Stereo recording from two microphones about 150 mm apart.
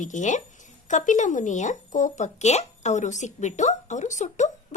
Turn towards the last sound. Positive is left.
turn(degrees=50)  # may be behind; listen again after turning